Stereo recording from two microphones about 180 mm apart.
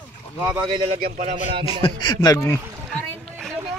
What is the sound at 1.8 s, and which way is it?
Speech, 25° left (ahead or behind).